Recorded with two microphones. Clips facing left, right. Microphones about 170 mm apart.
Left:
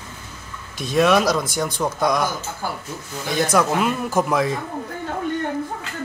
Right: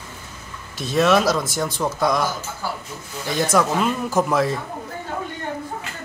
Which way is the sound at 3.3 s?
Centre (ahead or behind).